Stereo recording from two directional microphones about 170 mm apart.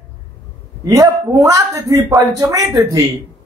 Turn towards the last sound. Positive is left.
turn(degrees=-20)  # may be behind; listen again after turning